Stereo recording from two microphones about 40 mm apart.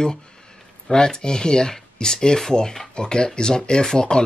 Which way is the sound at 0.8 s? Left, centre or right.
Centre.